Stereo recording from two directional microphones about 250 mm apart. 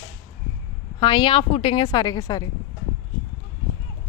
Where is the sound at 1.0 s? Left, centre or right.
Centre.